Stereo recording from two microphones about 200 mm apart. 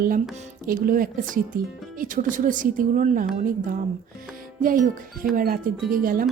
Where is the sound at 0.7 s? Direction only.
45° right (ahead or behind).